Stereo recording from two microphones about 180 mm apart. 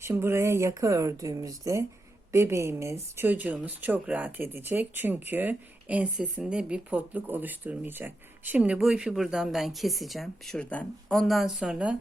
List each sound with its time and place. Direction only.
0.0 s speech: 15° right (ahead or behind)